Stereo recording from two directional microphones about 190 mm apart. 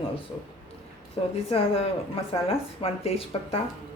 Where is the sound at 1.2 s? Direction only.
30° left (ahead or behind).